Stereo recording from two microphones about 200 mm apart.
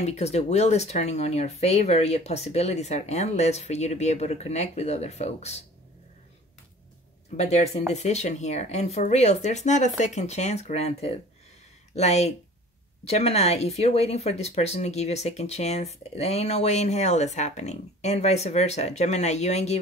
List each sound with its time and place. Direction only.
0.0 s speech: 35° left (ahead or behind)
7.3 s speech: 30° left (ahead or behind)